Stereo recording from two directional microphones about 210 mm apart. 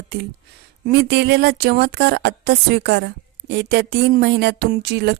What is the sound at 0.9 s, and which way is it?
Speech, 50° right (ahead or behind).